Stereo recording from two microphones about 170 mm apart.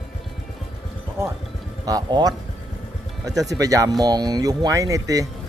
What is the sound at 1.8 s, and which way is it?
Speech, 25° right (ahead or behind).